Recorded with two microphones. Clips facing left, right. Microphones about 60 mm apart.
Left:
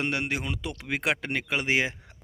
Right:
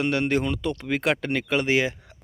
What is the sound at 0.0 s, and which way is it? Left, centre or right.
Speech, left.